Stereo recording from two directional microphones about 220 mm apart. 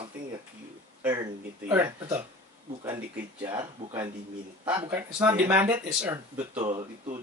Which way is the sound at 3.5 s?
20° right (ahead or behind).